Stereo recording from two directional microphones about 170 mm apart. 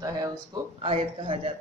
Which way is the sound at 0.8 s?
35° right (ahead or behind).